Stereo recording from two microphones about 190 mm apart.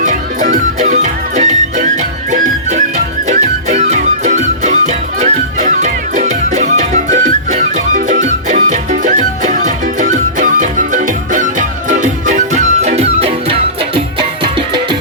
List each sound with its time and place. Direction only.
0.0 s music: 40° right (ahead or behind); by 14.9 s 25° right (ahead or behind)